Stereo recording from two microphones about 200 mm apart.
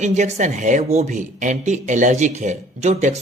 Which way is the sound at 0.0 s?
35° right (ahead or behind).